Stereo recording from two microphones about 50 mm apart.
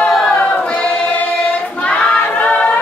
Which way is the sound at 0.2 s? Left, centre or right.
Left.